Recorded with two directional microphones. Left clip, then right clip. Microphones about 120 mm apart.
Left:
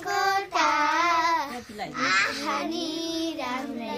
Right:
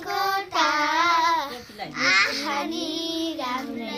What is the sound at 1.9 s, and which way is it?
Babbling, 15° left (ahead or behind).